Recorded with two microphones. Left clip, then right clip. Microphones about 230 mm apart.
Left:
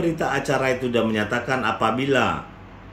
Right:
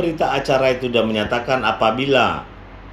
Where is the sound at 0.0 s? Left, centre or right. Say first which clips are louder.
Right 4 dB; centre.